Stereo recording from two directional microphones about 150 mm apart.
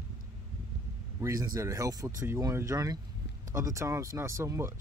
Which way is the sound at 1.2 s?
25° right (ahead or behind).